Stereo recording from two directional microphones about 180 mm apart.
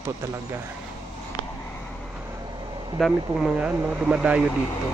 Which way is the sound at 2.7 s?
25° right (ahead or behind).